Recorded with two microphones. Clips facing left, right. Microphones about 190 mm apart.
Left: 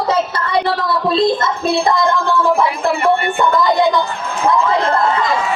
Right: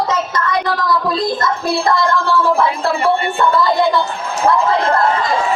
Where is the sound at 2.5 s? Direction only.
15° left (ahead or behind).